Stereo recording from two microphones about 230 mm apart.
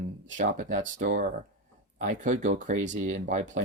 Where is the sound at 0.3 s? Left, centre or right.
Right.